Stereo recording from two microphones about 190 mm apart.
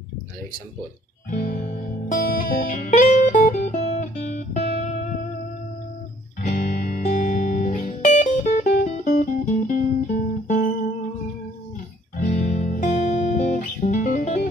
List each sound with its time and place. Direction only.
1.3 s music: 45° left (ahead or behind)
6.4 s music: 40° left (ahead or behind)
8.8 s guitar: 40° left (ahead or behind)
12.2 s guitar: 45° left (ahead or behind)